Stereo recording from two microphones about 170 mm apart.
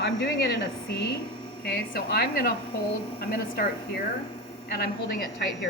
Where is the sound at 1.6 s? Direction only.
65° left (ahead or behind).